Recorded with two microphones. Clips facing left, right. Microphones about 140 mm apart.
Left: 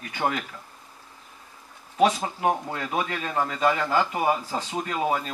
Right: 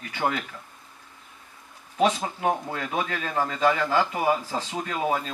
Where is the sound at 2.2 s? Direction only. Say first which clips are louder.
Left 1 dB; 30° left (ahead or behind).